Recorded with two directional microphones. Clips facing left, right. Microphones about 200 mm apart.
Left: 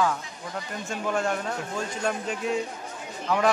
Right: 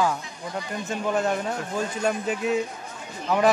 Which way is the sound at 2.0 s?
5° right (ahead or behind).